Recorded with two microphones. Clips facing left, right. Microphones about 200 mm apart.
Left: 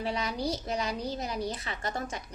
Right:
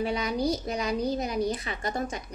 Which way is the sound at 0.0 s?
15° right (ahead or behind).